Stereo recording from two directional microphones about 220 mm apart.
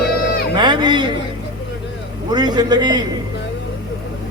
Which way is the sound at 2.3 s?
20° right (ahead or behind).